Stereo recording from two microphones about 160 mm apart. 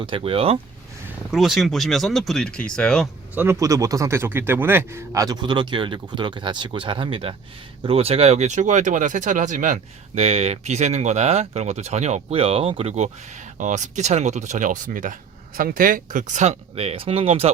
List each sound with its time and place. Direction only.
0.0 s speech: 35° right (ahead or behind)
1.3 s speech: centre (ahead or behind)
3.3 s a man's voice: 15° right (ahead or behind); by 17.5 s 40° right (ahead or behind)